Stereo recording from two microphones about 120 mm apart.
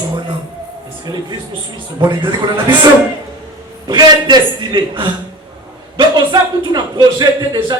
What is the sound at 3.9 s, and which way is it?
A man's voice, 35° right (ahead or behind).